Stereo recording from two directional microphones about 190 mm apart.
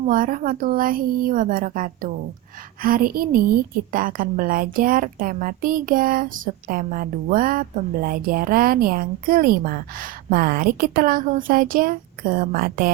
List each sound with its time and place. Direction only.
0.1 s speech: 45° right (ahead or behind)